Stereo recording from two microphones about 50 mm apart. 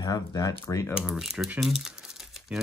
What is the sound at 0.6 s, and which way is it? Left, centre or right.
Speech, left.